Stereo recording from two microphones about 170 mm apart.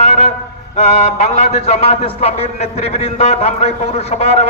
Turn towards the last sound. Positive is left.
turn(degrees=40)  # may be behind; listen again after turning